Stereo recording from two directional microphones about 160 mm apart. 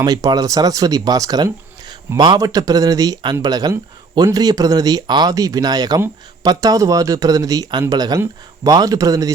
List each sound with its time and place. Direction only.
0.0 s speech: 25° right (ahead or behind)